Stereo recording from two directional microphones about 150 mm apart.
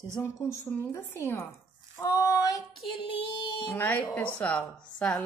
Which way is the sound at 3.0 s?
35° left (ahead or behind).